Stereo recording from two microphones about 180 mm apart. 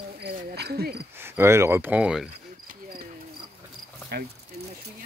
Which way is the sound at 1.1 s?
15° right (ahead or behind).